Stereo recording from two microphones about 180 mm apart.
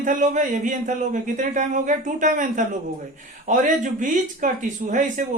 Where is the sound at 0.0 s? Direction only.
45° right (ahead or behind).